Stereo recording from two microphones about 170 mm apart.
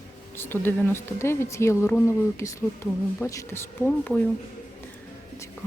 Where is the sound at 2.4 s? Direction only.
15° left (ahead or behind).